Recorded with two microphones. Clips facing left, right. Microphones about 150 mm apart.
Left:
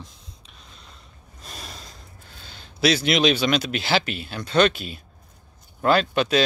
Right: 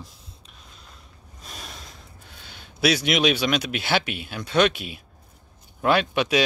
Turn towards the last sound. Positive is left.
turn(degrees=-5)  # may be behind; listen again after turning